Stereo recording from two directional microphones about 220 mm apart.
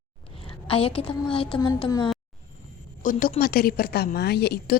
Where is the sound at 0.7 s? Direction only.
25° left (ahead or behind).